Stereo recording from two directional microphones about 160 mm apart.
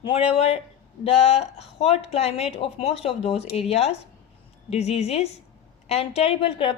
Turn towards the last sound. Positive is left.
turn(degrees=35)  # may be behind; listen again after turning